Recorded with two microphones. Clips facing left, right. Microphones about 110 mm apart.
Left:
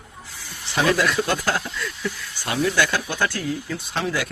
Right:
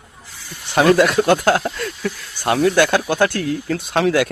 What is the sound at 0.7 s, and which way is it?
Speech, 50° right (ahead or behind).